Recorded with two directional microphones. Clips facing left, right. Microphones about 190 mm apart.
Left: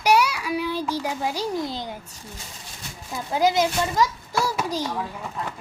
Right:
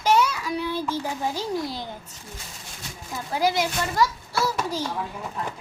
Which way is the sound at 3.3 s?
20° left (ahead or behind).